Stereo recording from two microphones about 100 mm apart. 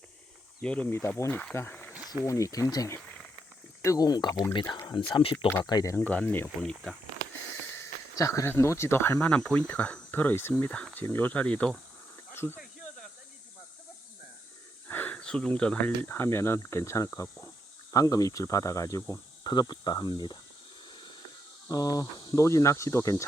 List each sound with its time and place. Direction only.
0.6 s speech: 10° left (ahead or behind)
2.2 s speech: 30° left (ahead or behind)
5.1 s speech: 65° left (ahead or behind)
5.6 s speech: 35° left (ahead or behind)
6.1 s speech: 20° left (ahead or behind)
6.6 s speech: 5° left (ahead or behind)
8.1 s speech: 30° left (ahead or behind); by 11.7 s 15° left (ahead or behind)
12.3 s a sound: 25° left (ahead or behind)
14.8 s a sound: 15° left (ahead or behind)
16.0 s speech: 25° left (ahead or behind)
19.5 s speech: 45° left (ahead or behind)
21.7 s speech: 40° left (ahead or behind)